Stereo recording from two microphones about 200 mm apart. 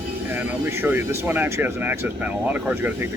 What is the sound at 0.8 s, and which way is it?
Speech, 10° right (ahead or behind).